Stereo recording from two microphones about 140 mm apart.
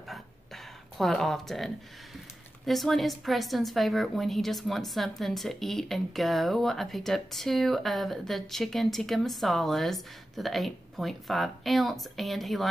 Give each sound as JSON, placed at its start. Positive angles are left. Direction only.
{"t": 0.9, "sound": "a woman's voice", "side_deg": 0}